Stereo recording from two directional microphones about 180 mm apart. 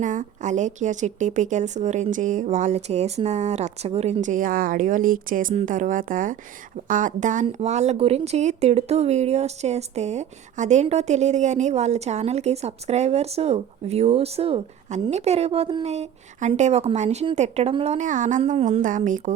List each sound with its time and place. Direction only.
0.0 s a woman's voice: 45° right (ahead or behind)